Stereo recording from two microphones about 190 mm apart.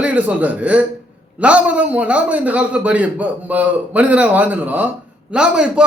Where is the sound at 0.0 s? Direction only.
5° right (ahead or behind).